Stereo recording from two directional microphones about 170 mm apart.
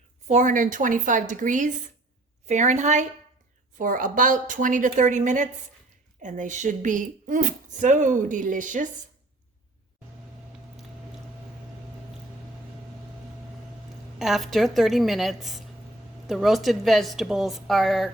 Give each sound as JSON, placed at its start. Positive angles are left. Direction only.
{"t": 0.3, "sound": "speech", "side_deg": -45}
{"t": 14.2, "sound": "a woman's voice", "side_deg": 0}